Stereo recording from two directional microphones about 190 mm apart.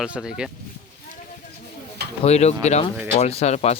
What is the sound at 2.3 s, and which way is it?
Speech, 35° left (ahead or behind).